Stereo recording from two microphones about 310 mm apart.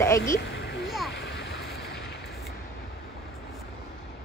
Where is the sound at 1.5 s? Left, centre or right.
Centre.